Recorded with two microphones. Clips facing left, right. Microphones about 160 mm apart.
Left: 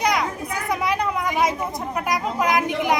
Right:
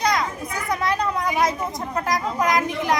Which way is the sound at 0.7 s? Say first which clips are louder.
Even; 10° left (ahead or behind).